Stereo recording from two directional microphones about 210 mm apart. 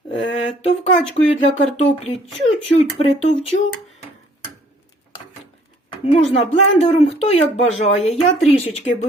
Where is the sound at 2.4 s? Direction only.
30° left (ahead or behind).